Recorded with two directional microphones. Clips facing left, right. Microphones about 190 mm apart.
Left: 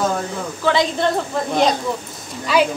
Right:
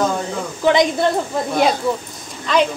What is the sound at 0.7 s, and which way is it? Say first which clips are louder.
Speech: right 3 dB; 15° right (ahead or behind).